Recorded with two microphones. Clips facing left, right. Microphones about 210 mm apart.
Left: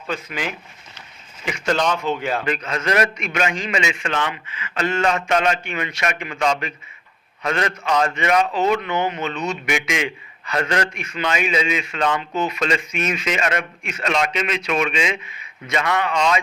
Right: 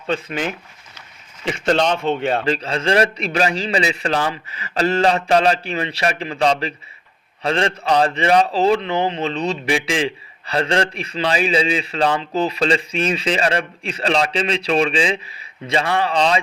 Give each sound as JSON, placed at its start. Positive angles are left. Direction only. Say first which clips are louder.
{"t": 1.5, "sound": "a man's voice", "louder": "right 3 dB", "side_deg": -30}